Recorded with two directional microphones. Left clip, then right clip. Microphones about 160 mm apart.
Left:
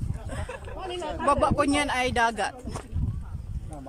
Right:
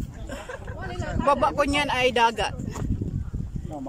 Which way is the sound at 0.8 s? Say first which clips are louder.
Left 1 dB; 15° left (ahead or behind).